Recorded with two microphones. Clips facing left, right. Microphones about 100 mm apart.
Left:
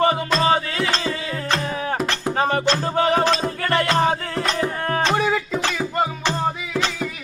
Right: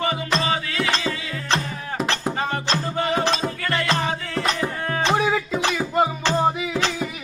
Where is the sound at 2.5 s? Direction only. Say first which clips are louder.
Left 4 dB; 50° left (ahead or behind).